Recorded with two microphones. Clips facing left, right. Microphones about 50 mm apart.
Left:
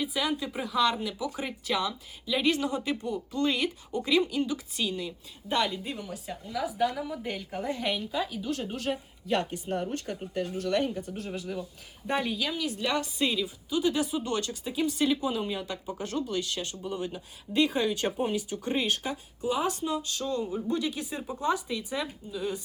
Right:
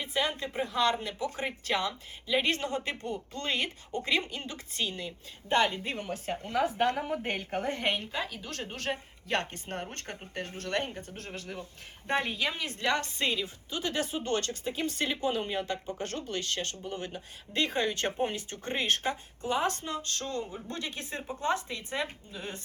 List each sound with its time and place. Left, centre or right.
0.0 s a woman's voice: right
1.9 s speech: right
2.5 s a woman's voice: right